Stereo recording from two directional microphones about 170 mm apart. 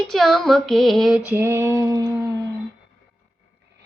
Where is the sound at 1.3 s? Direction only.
15° right (ahead or behind).